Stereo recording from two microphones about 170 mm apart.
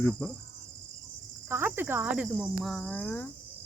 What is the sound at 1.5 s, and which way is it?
Speech, 10° right (ahead or behind).